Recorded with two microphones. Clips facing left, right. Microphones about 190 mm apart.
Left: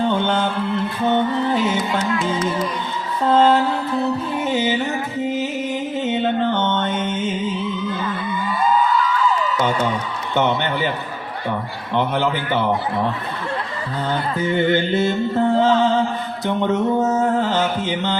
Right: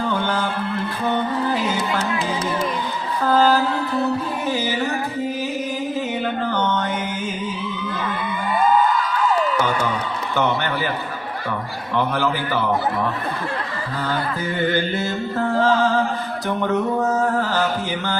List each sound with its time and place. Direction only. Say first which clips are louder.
0.0 s mantra: left 3 dB; 25° left (ahead or behind)
1.0 s music: left 3 dB; 20° left (ahead or behind)
3.2 s mantra: left 2 dB; 25° left (ahead or behind)
6.1 s mantra: left 4 dB; 25° left (ahead or behind)
11.9 s mantra: left 1 dB; 20° left (ahead or behind)
14.4 s mantra: left 5 dB; 20° left (ahead or behind)